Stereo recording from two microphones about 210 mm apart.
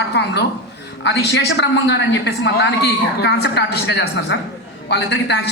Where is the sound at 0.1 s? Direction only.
55° left (ahead or behind).